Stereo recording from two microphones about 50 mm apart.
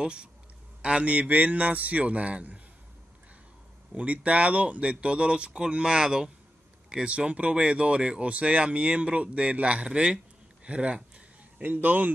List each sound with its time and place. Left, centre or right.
0.0 s a man's voice: centre
3.9 s speech: right
11.6 s speech: right